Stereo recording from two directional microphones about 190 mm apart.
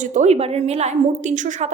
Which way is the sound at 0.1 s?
35° right (ahead or behind).